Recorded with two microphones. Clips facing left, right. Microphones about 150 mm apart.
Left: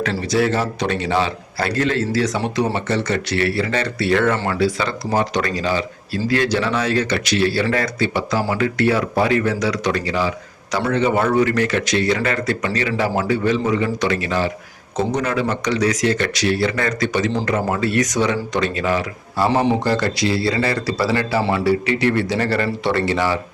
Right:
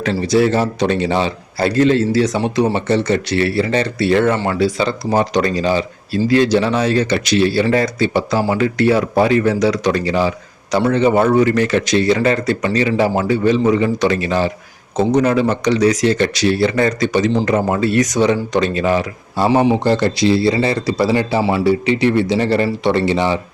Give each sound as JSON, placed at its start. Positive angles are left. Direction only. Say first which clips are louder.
{"t": 0.0, "sound": "a man's voice", "louder": "right 4 dB", "side_deg": -25}